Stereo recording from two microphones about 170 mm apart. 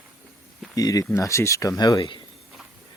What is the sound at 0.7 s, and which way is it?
Speech, 20° left (ahead or behind).